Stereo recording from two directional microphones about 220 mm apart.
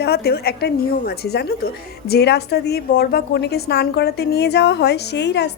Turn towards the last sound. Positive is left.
turn(degrees=50)  # may be behind; listen again after turning